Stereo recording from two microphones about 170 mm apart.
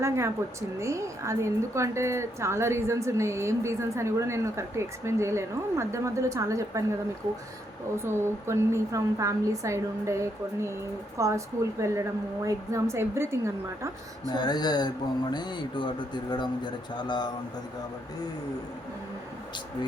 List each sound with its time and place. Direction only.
0.0 s a woman's voice: 15° right (ahead or behind)
7.9 s a woman's voice: 15° right (ahead or behind)
14.3 s speech: 25° left (ahead or behind)